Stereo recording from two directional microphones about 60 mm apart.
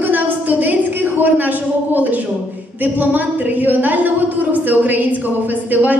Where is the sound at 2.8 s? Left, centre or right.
Right.